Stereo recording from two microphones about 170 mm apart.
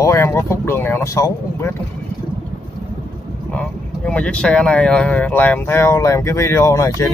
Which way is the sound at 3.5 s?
5° left (ahead or behind).